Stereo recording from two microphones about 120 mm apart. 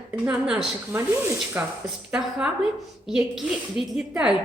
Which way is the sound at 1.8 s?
5° right (ahead or behind).